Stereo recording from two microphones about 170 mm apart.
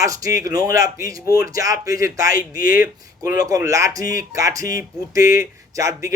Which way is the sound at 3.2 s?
20° right (ahead or behind).